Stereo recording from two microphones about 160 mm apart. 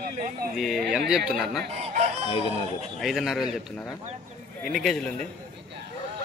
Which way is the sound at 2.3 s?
35° left (ahead or behind).